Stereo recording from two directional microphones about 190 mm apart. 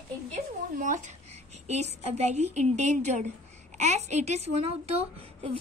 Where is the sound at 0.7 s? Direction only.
40° right (ahead or behind).